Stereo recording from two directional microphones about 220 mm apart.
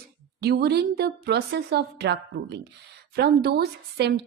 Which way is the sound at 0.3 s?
45° right (ahead or behind).